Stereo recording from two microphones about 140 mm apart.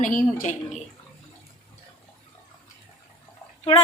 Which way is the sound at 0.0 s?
70° left (ahead or behind).